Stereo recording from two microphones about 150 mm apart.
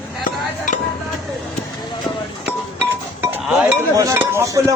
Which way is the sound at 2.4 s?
15° right (ahead or behind).